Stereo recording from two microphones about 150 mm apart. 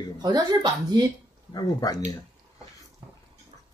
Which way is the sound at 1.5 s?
25° left (ahead or behind).